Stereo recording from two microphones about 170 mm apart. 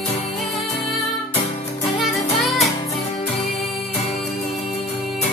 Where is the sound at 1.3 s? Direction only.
20° left (ahead or behind).